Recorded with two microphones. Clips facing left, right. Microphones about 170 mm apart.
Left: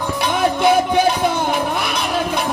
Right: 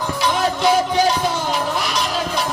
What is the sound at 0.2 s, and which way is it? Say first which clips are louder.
Music: left 2 dB; 55° left (ahead or behind).